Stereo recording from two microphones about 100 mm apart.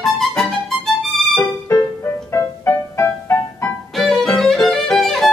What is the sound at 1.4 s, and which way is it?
Music, 25° left (ahead or behind).